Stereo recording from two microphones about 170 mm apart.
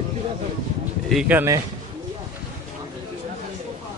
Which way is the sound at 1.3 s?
15° right (ahead or behind).